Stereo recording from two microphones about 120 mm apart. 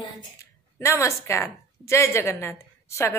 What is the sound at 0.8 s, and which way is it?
A woman's voice, 25° left (ahead or behind).